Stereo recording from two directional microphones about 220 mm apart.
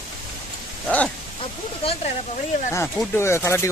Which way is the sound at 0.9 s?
5° left (ahead or behind).